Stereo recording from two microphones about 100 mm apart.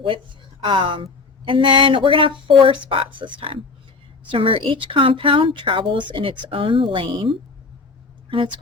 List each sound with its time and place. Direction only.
0.6 s speech: 55° right (ahead or behind)